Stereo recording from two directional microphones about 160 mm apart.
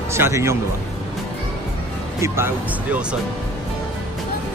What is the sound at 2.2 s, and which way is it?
Speech, 15° right (ahead or behind).